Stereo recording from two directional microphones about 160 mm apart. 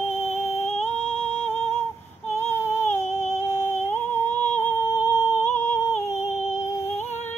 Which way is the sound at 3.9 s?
45° left (ahead or behind).